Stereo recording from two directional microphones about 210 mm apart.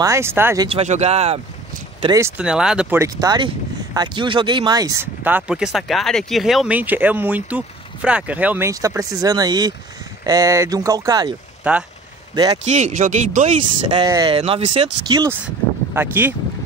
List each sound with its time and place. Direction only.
0.0 s speech: 15° right (ahead or behind)
0.7 s speech: 30° right (ahead or behind)
2.1 s speech: 10° right (ahead or behind)
11.6 s speech: 5° right (ahead or behind)
12.6 s speech: 35° right (ahead or behind)
14.0 s speech: 15° right (ahead or behind)
14.3 s speech: 25° right (ahead or behind); by 16.3 s 10° right (ahead or behind)